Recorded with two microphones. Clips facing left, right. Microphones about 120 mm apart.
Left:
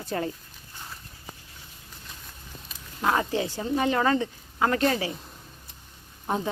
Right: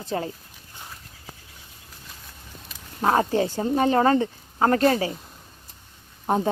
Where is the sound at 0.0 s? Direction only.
25° right (ahead or behind).